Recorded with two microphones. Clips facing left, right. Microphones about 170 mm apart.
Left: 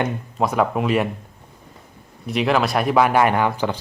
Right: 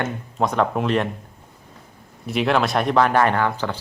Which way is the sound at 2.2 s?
Centre (ahead or behind).